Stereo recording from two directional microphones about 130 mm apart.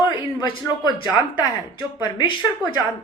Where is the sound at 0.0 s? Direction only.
35° left (ahead or behind).